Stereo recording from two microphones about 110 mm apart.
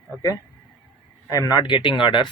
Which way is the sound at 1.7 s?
45° left (ahead or behind).